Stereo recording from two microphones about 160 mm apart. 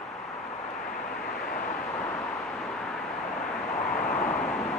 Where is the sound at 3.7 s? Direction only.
60° left (ahead or behind).